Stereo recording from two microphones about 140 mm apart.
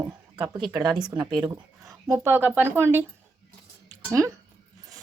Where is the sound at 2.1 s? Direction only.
15° right (ahead or behind).